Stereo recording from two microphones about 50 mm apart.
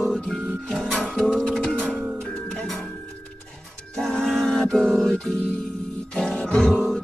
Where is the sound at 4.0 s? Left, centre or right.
Centre.